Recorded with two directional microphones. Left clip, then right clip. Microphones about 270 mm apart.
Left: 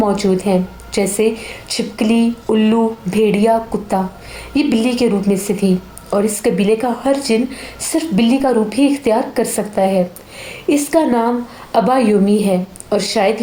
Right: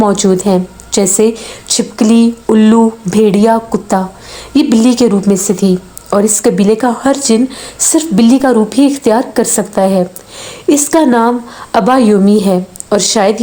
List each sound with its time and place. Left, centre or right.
0.0 s a woman's voice: right